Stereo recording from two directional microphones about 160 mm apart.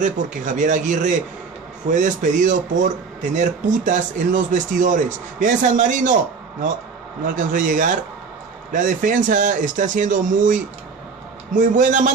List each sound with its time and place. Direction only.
0.0 s speech: 50° right (ahead or behind)
7.2 s speech: 55° right (ahead or behind)